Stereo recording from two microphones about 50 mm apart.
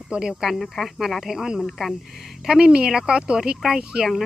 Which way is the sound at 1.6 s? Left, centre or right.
Centre.